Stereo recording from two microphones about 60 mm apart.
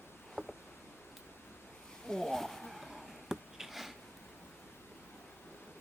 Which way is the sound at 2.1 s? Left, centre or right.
Centre.